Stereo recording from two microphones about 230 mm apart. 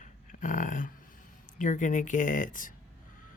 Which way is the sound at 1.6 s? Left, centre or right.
Left.